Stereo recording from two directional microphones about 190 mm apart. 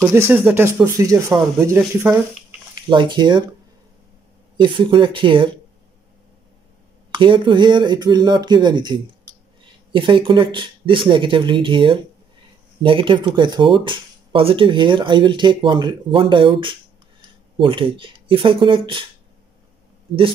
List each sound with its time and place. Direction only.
0.3 s speech: 10° right (ahead or behind)
2.9 s speech: 25° right (ahead or behind)
4.6 s speech: 25° right (ahead or behind)
7.2 s speech: 25° right (ahead or behind)